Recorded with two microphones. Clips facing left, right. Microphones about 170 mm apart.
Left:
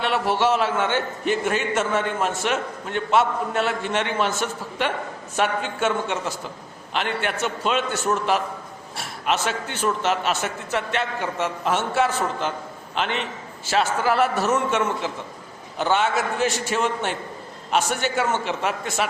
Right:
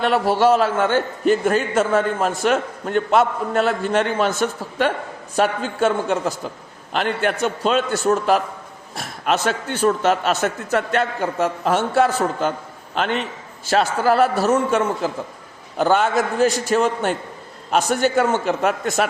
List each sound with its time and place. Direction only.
0.0 s a man's voice: 40° right (ahead or behind)
5.4 s a man's voice: 40° right (ahead or behind)